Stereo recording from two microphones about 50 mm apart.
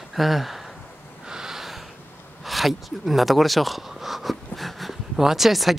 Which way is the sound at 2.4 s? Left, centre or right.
Centre.